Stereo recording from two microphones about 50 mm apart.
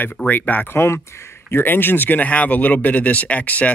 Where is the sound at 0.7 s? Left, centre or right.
Left.